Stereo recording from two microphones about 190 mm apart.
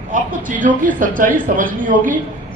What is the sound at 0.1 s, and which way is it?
A man's voice, 45° right (ahead or behind).